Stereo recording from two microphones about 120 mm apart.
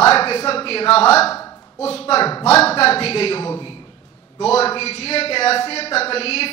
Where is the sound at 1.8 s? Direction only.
60° left (ahead or behind).